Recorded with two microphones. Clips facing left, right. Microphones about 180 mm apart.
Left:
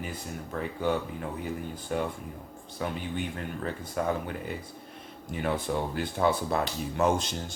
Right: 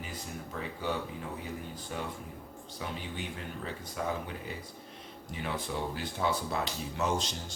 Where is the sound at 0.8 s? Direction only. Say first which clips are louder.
Left 6 dB; 55° left (ahead or behind).